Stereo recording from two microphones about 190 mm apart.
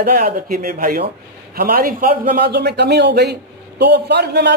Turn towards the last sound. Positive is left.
turn(degrees=-60)  # may be behind; listen again after turning